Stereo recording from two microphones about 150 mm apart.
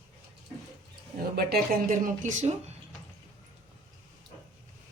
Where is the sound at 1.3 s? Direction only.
75° right (ahead or behind); by 2.7 s 50° right (ahead or behind).